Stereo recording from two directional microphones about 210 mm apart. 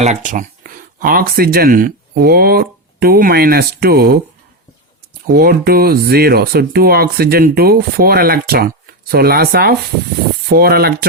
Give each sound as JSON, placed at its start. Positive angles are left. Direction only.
{"t": 0.0, "sound": "speech", "side_deg": -35}
{"t": 5.2, "sound": "speech", "side_deg": -45}